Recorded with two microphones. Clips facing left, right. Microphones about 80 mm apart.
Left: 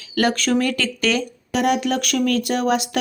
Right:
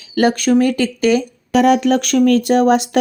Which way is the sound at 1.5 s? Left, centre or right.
Right.